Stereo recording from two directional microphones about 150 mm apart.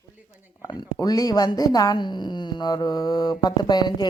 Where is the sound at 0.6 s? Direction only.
25° left (ahead or behind).